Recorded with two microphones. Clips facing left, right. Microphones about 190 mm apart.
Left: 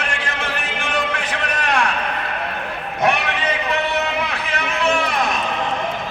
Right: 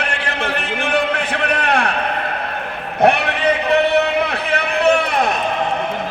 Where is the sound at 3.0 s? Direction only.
60° right (ahead or behind).